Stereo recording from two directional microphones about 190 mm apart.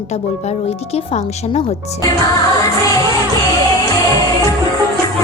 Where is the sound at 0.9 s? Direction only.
30° left (ahead or behind).